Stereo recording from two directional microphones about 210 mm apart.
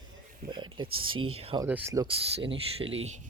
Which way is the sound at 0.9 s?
80° right.